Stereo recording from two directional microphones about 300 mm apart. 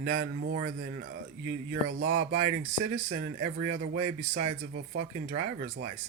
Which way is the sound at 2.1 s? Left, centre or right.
Right.